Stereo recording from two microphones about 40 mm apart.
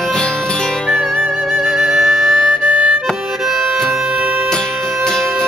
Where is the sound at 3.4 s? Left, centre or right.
Centre.